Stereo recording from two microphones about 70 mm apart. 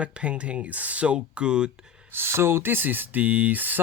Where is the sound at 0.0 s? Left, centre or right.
Centre.